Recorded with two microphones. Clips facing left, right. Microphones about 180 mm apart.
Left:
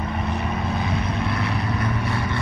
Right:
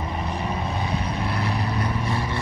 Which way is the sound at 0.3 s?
35° right (ahead or behind).